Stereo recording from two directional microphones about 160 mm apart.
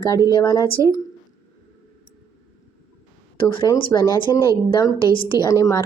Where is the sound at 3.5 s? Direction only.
30° left (ahead or behind).